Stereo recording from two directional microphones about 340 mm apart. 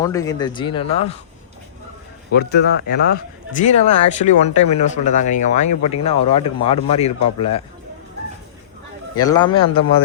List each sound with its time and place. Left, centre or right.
0.0 s speech: centre
2.3 s speech: left
9.1 s speech: centre